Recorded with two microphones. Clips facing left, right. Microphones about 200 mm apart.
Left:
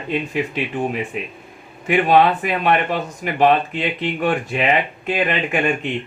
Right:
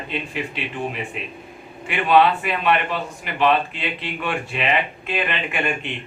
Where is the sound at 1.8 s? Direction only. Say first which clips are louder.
Left 2 dB; 40° left (ahead or behind).